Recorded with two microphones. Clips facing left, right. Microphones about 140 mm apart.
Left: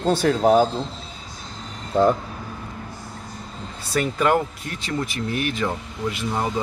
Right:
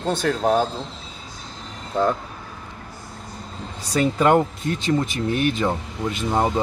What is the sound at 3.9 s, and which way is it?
Speech, 25° right (ahead or behind).